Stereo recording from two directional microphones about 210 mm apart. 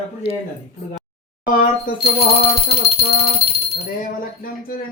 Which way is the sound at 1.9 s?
40° left (ahead or behind).